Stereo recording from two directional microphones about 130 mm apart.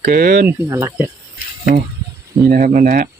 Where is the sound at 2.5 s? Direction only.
90° right.